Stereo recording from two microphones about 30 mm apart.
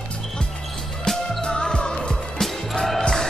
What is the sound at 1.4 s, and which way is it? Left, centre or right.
Music, left.